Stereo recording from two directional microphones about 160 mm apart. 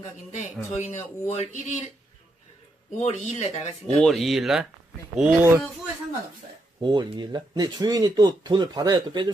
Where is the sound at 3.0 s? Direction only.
45° left (ahead or behind).